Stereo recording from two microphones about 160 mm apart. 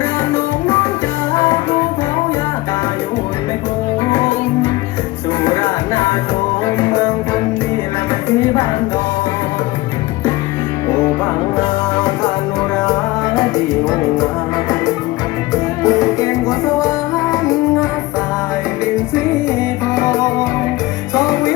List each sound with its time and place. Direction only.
5.4 s music: 15° left (ahead or behind)
15.5 s music: 20° left (ahead or behind)
18.9 s music: 20° left (ahead or behind)